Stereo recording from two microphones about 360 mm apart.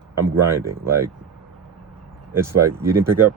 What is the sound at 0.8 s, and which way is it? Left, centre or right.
Speech, centre.